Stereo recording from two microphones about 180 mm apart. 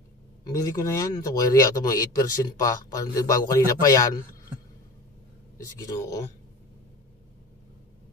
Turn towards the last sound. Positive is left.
turn(degrees=20)  # may be behind; listen again after turning